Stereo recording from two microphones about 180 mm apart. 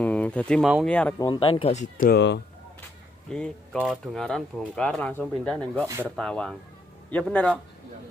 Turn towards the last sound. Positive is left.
turn(degrees=5)  # may be behind; listen again after turning